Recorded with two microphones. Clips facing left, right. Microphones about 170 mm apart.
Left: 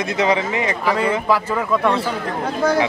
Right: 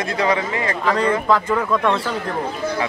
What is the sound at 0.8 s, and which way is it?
A man's voice, 10° left (ahead or behind).